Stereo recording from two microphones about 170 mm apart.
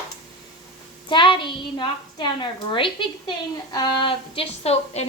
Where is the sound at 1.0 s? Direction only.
30° left (ahead or behind).